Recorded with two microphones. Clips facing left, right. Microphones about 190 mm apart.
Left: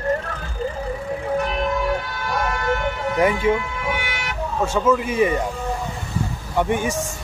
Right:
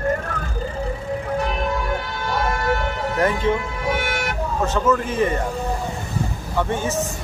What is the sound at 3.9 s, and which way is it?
Vehicle, 45° right (ahead or behind).